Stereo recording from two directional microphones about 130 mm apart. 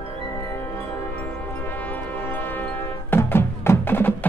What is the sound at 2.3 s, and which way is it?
Music, 15° left (ahead or behind).